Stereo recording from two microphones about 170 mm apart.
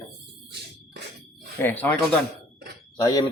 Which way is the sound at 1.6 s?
10° left (ahead or behind).